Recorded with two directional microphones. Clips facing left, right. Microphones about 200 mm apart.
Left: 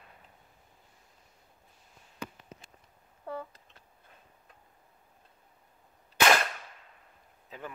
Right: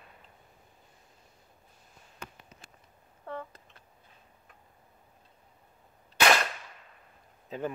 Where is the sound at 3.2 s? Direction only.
10° left (ahead or behind).